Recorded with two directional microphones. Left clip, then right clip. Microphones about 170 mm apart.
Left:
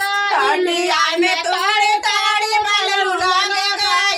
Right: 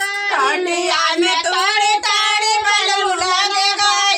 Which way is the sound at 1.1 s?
15° left (ahead or behind).